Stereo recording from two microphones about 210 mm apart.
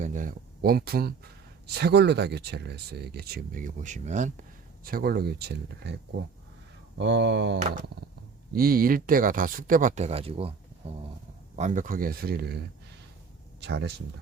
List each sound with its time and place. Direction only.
0.0 s speech: 40° right (ahead or behind)
7.0 s speech: 55° right (ahead or behind)
8.5 s speech: 45° right (ahead or behind)